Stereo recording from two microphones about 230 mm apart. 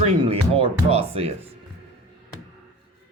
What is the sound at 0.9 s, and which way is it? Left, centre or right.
Speech, right.